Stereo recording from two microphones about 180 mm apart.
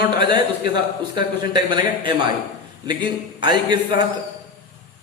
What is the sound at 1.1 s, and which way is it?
A man's voice, 25° right (ahead or behind).